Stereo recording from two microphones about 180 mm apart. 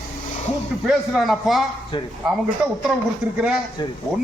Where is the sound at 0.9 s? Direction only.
Centre (ahead or behind).